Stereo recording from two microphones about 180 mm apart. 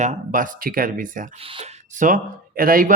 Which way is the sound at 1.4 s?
30° right (ahead or behind).